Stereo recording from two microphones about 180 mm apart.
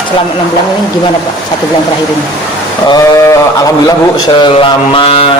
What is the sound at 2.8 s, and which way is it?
Speech, 20° left (ahead or behind).